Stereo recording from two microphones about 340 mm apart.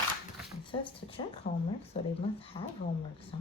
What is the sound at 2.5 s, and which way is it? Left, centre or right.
Speech, centre.